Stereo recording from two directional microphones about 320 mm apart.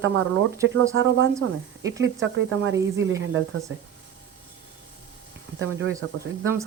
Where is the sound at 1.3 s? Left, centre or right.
Centre.